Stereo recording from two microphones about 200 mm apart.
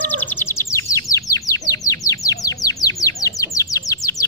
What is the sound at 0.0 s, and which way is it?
Bird, 10° left (ahead or behind).